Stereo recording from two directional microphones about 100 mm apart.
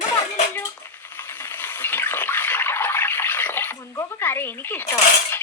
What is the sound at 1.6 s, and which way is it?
Water, 20° left (ahead or behind).